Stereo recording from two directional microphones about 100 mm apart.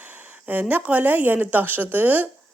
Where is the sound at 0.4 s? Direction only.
15° right (ahead or behind).